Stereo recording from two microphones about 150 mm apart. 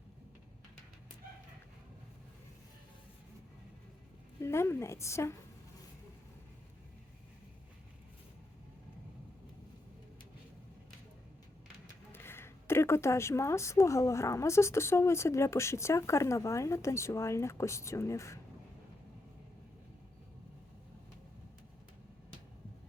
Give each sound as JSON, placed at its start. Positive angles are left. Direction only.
{"t": 4.4, "sound": "speech", "side_deg": 15}
{"t": 12.1, "sound": "speech", "side_deg": 15}